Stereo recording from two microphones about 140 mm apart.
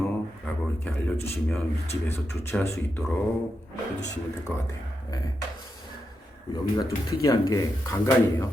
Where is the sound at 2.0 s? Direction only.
20° left (ahead or behind).